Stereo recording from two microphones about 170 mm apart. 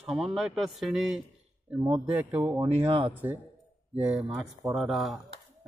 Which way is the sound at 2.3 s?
10° right (ahead or behind).